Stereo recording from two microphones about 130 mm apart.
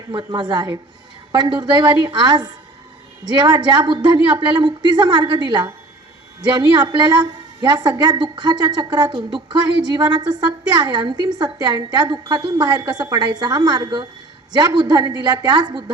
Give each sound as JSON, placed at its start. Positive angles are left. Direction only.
{"t": 0.1, "sound": "a woman's voice", "side_deg": -35}